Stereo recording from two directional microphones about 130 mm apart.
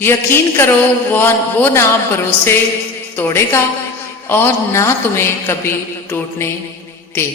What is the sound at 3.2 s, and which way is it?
A woman's voice, 20° left (ahead or behind).